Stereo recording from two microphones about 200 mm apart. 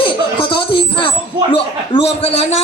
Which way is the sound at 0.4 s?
25° left (ahead or behind).